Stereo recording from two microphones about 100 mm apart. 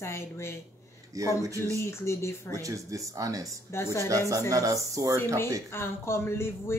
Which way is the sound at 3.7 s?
25° left (ahead or behind).